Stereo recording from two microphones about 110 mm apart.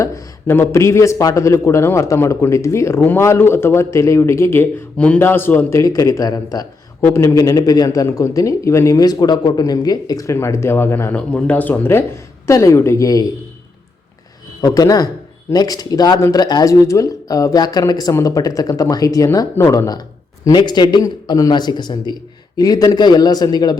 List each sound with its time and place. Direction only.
0.0 s speech: 25° left (ahead or behind)
5.8 s speech: 30° left (ahead or behind)
7.0 s speech: 25° left (ahead or behind)
11.3 s speech: 10° left (ahead or behind); by 13.3 s 35° left (ahead or behind)
14.6 s speech: 35° left (ahead or behind)
20.4 s speech: 40° left (ahead or behind)